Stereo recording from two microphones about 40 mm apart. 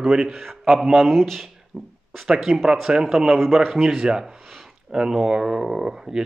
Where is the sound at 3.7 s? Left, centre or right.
Centre.